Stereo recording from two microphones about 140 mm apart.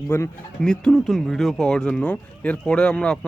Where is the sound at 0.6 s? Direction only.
5° left (ahead or behind).